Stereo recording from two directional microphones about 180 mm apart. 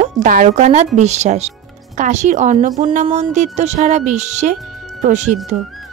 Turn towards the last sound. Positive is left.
turn(degrees=-40)  # may be behind; listen again after turning